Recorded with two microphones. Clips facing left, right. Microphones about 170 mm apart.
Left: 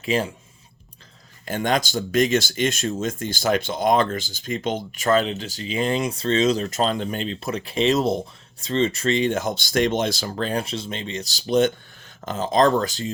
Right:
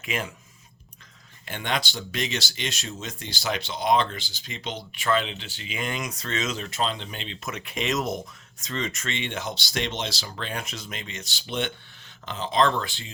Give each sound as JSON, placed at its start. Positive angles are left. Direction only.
{"t": 0.0, "sound": "speech", "side_deg": 30}
{"t": 1.5, "sound": "speech", "side_deg": 45}